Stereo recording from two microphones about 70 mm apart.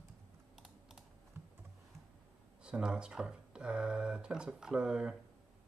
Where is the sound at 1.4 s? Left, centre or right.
Right.